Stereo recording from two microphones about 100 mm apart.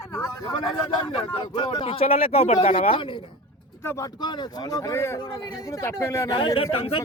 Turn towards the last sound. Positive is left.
turn(degrees=70)  # may be behind; listen again after turning